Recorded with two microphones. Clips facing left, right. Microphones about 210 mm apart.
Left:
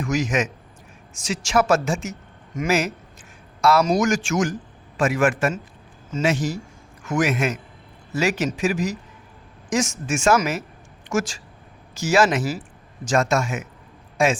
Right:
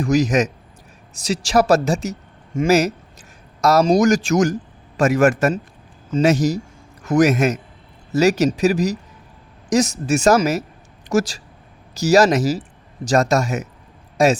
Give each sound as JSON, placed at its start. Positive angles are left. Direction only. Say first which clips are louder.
{"t": 0.0, "sound": "a man's voice", "louder": "right 6 dB", "side_deg": -35}